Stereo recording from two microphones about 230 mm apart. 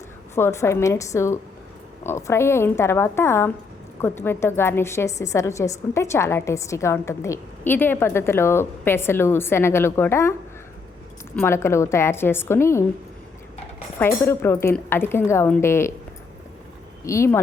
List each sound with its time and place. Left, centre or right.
0.3 s a woman's voice: centre
11.3 s a woman's voice: centre
14.0 s a woman's voice: centre
17.0 s speech: centre